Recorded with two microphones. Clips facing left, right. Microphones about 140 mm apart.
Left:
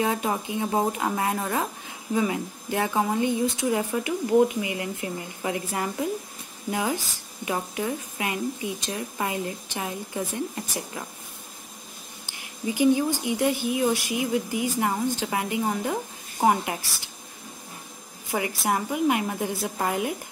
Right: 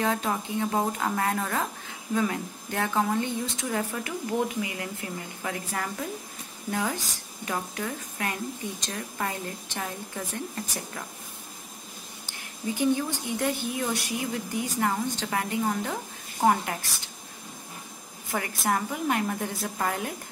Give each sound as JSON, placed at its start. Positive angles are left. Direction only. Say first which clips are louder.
{"t": 0.0, "sound": "speech", "louder": "left 2 dB", "side_deg": 15}
{"t": 12.6, "sound": "speech", "louder": "left 4 dB", "side_deg": 15}
{"t": 18.3, "sound": "speech", "louder": "left 2 dB", "side_deg": 15}